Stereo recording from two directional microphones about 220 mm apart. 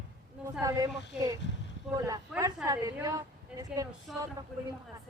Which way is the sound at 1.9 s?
15° right (ahead or behind).